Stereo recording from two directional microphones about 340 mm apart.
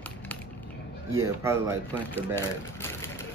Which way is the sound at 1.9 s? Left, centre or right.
Centre.